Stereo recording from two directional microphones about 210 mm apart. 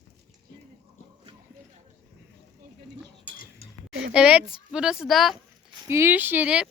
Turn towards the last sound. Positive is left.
turn(degrees=-5)  # may be behind; listen again after turning